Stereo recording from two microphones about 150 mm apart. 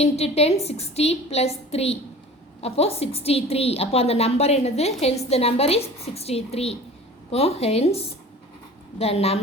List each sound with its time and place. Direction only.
0.0 s a woman's voice: 45° left (ahead or behind)